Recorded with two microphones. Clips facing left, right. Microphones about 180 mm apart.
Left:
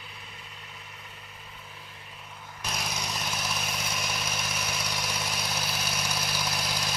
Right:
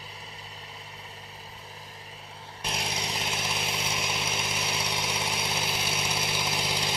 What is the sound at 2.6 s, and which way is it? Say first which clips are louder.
Vehicle: right 1 dB; 25° right (ahead or behind).